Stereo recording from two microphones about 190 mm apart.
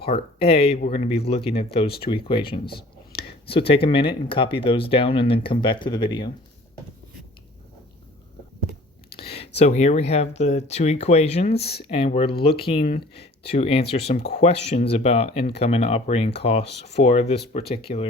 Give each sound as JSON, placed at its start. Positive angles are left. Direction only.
{"t": 0.0, "sound": "speech", "side_deg": 30}
{"t": 9.1, "sound": "speech", "side_deg": 30}